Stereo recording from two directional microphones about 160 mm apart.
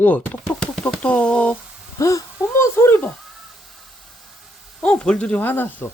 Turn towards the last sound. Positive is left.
turn(degrees=10)  # may be behind; listen again after turning